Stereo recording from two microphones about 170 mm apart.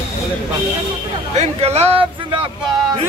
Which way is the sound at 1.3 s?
40° right (ahead or behind).